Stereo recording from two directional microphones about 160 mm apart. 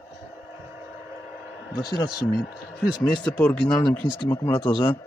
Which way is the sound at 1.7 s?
5° left (ahead or behind).